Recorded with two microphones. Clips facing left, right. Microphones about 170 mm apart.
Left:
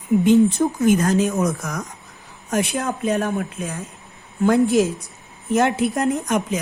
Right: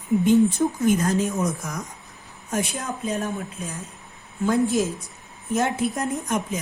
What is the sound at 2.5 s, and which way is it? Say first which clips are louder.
A woman's voice: left 5 dB; 70° left (ahead or behind).